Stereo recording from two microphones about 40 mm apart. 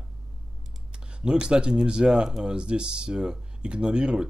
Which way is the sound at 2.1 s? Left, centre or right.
Centre.